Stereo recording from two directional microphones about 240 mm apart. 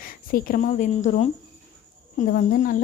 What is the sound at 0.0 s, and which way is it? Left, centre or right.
A woman's voice, left.